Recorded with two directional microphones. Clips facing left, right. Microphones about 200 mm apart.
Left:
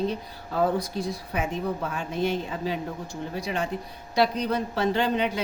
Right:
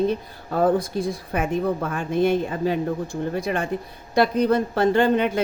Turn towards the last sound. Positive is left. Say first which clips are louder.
# right 6 dB
turn(degrees=-50)  # may be behind; listen again after turning